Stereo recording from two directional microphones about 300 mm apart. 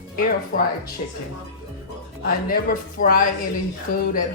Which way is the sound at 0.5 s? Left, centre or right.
Left.